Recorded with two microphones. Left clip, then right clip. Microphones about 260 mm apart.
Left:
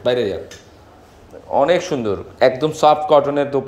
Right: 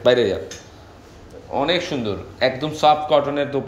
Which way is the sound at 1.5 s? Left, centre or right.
Centre.